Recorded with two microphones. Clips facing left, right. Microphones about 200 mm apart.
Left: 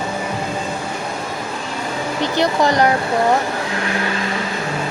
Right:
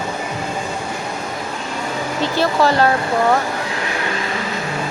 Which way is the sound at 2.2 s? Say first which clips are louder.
Even; 15° left (ahead or behind).